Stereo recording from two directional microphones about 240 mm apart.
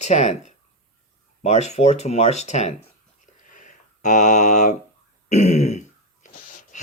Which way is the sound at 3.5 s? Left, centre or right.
Left.